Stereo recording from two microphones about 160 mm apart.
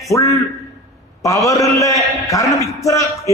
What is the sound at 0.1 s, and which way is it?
A man's voice, 20° left (ahead or behind).